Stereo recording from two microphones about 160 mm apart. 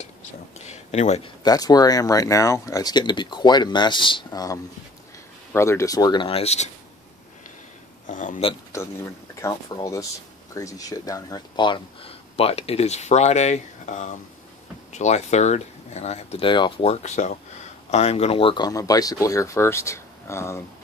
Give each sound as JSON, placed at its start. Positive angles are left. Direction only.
{"t": 0.6, "sound": "a sound", "side_deg": 45}
{"t": 1.4, "sound": "speech", "side_deg": 25}
{"t": 8.1, "sound": "speech", "side_deg": 50}
{"t": 8.7, "sound": "speech", "side_deg": 20}